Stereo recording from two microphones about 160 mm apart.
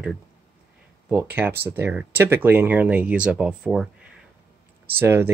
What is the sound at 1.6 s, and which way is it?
Speech, 15° right (ahead or behind).